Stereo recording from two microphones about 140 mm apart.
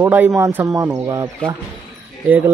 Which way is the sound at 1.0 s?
25° right (ahead or behind).